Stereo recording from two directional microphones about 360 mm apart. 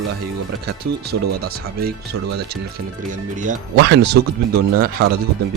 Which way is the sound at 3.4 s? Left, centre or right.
Right.